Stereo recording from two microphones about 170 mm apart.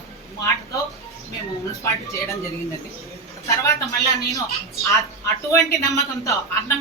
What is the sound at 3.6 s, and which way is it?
Speech, 20° left (ahead or behind).